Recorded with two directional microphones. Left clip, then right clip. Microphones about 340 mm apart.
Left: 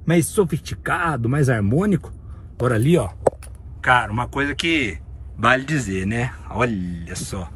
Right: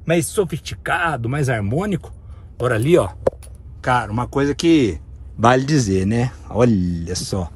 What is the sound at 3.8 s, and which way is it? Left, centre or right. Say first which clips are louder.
Speech: left 2 dB; centre.